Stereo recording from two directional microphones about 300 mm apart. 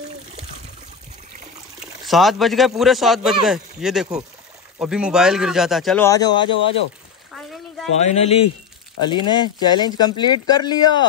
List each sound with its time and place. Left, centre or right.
2.0 s a man's voice: centre
8.0 s speech: left